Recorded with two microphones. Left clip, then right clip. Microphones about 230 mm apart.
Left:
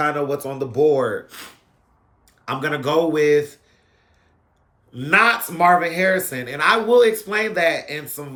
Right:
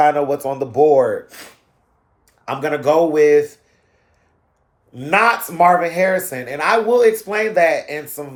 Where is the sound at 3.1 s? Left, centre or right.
Right.